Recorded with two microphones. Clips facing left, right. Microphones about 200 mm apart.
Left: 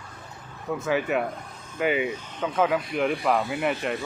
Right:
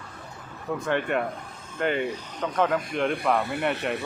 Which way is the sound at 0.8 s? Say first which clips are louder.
Left 1 dB; 5° left (ahead or behind).